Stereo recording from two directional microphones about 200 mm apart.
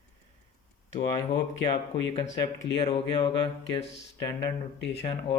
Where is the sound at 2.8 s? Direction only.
25° left (ahead or behind).